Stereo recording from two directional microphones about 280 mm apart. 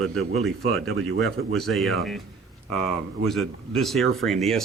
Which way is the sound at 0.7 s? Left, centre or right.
Right.